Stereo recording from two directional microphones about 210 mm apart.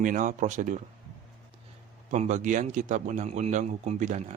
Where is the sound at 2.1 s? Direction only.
35° right (ahead or behind).